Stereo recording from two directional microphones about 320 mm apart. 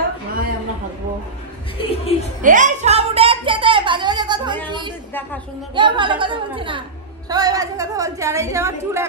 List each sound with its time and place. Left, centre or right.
1.8 s speech: centre
2.4 s a sound: right
5.8 s a woman's voice: centre